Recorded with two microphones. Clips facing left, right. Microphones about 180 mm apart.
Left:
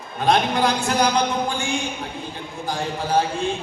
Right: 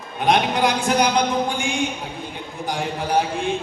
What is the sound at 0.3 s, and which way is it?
Speech, 15° right (ahead or behind).